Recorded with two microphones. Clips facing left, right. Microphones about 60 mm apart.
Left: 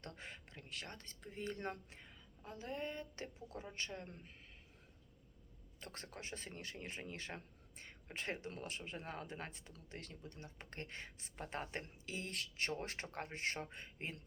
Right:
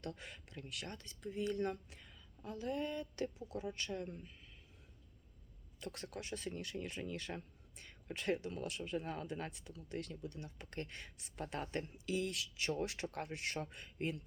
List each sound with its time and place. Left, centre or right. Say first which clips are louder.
0.0 s a man's voice: right 4 dB; left
5.8 s a man's voice: right 4 dB; left